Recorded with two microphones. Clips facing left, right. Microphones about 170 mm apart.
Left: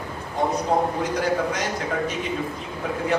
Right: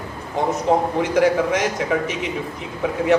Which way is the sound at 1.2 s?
85° right.